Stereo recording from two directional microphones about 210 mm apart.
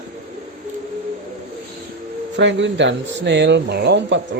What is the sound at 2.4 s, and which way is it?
Speech, 60° right (ahead or behind).